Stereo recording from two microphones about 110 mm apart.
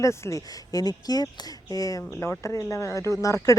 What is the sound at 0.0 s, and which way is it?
Speech, 30° left (ahead or behind).